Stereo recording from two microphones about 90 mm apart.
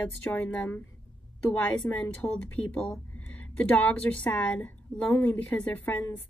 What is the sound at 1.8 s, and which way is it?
Speech, 15° left (ahead or behind).